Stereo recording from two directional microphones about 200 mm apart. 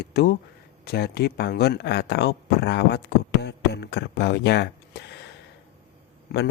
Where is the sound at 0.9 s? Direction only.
55° left (ahead or behind).